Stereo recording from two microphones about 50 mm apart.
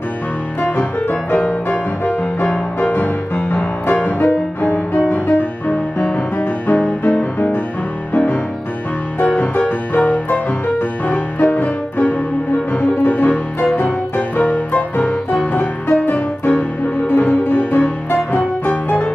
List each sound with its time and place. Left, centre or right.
1.3 s music: left
3.4 s music: left
9.4 s music: left